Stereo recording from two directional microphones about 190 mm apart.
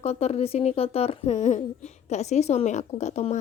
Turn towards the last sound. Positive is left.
turn(degrees=35)  # may be behind; listen again after turning